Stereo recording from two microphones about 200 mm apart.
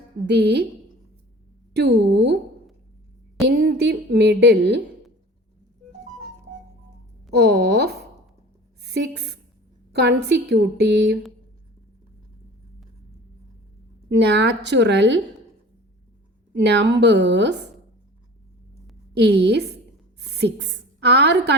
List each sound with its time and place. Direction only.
0.3 s speech: 55° right (ahead or behind)
1.7 s speech: 60° right (ahead or behind)
3.4 s speech: 55° right (ahead or behind)
7.3 s speech: 55° right (ahead or behind)
8.8 s a sound: 55° right (ahead or behind)
9.9 s speech: 55° right (ahead or behind)
14.1 s speech: 60° right (ahead or behind)
16.5 s speech: 60° right (ahead or behind)
19.1 s a woman's voice: 60° right (ahead or behind)